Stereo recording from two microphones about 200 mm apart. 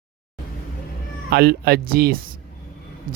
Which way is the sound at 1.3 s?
50° right (ahead or behind).